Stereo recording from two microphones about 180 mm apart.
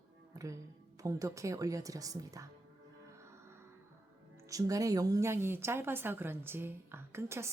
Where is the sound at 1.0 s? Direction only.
20° right (ahead or behind).